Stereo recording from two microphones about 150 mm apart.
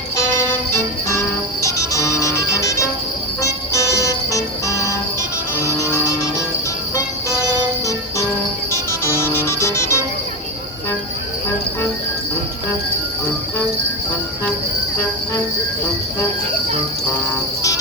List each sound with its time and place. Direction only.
0.2 s music: 20° left (ahead or behind)
8.7 s music: 20° left (ahead or behind)